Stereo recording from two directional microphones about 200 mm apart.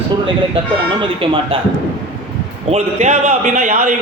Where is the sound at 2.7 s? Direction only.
30° right (ahead or behind).